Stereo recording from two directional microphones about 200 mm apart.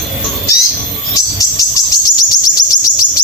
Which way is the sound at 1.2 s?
15° left (ahead or behind).